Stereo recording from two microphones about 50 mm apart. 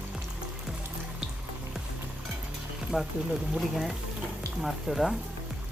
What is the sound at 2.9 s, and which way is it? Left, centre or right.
Speech, centre.